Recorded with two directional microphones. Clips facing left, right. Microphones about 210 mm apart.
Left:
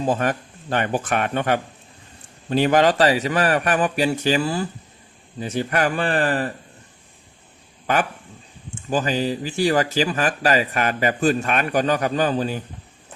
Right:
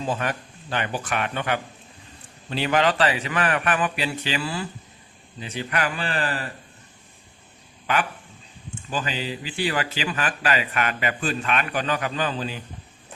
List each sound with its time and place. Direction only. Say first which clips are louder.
0.0 s a man's voice: left 5 dB; 45° left (ahead or behind)
8.9 s a man's voice: left 7 dB; 45° left (ahead or behind)